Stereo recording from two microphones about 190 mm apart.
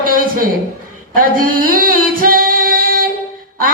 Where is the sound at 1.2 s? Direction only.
45° right (ahead or behind).